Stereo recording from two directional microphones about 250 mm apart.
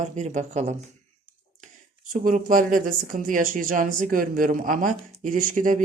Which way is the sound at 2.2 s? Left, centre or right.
Right.